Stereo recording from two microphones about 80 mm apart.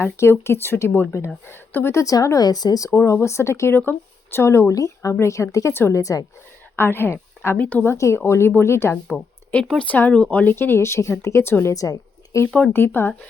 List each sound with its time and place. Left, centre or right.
0.0 s speech: left
2.1 s speech: left
5.7 s speech: left
6.0 s speech: left
6.7 s a woman's voice: left
7.9 s speech: left
9.0 s a sound: centre
9.8 s speech: centre; by 11.5 s left
11.6 s speech: left
12.5 s speech: centre
12.7 s speech: left